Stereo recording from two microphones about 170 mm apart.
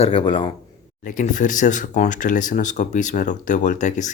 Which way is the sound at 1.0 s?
50° left (ahead or behind).